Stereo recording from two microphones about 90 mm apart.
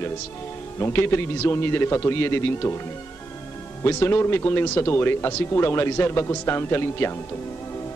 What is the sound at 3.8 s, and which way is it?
Speech, 25° left (ahead or behind).